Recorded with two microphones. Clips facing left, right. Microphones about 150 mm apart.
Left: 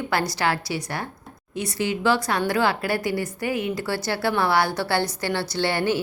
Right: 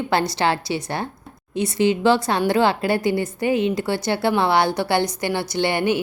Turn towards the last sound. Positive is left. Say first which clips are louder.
# right 3 dB
turn(degrees=-15)  # may be behind; listen again after turning